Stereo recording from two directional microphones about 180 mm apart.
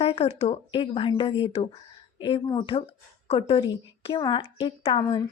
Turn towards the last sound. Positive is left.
turn(degrees=30)  # may be behind; listen again after turning